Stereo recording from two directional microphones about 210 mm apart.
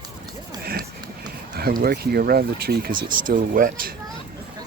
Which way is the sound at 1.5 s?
45° right (ahead or behind).